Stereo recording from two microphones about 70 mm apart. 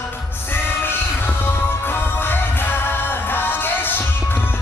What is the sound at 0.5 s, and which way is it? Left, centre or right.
Music, left.